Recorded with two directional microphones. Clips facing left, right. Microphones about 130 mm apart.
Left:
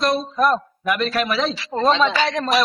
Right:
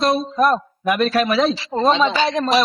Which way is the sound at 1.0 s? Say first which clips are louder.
Right 5 dB; 45° right (ahead or behind).